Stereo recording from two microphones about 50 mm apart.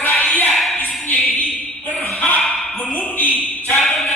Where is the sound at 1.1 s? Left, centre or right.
Left.